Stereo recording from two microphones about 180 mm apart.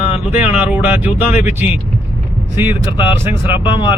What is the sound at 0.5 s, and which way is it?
Speech, 5° right (ahead or behind).